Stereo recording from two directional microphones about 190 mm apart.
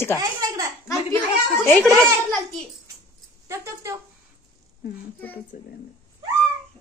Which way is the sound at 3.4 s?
15° right (ahead or behind).